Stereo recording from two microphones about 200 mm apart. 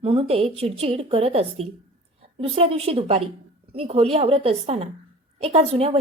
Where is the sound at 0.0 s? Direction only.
25° right (ahead or behind).